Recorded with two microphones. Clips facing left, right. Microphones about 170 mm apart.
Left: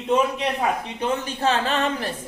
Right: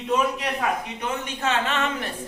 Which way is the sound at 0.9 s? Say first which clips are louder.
Left 4 dB; 30° left (ahead or behind).